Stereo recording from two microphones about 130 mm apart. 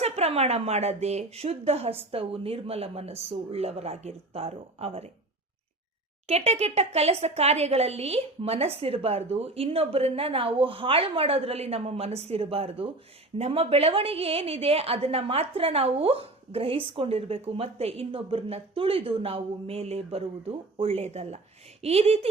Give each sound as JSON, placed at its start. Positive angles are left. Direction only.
{"t": 0.0, "sound": "a woman's voice", "side_deg": -55}
{"t": 6.2, "sound": "a woman's voice", "side_deg": -55}